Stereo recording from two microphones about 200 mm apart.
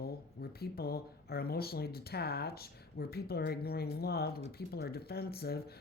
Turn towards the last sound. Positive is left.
turn(degrees=50)  # may be behind; listen again after turning